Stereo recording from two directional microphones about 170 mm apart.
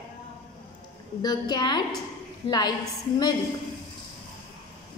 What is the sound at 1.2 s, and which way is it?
A woman's voice, 25° left (ahead or behind).